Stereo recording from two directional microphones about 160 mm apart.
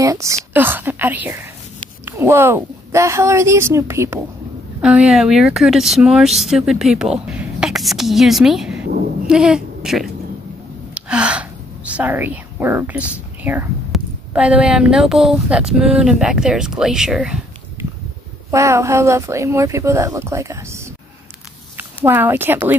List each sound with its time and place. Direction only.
0.0 s a woman's voice: 20° right (ahead or behind)
4.8 s a woman's voice: 5° right (ahead or behind)
11.0 s gasp: 5° right (ahead or behind)
13.9 s speech: 5° right (ahead or behind)
18.5 s speech: 20° right (ahead or behind)
22.0 s speech: 15° right (ahead or behind)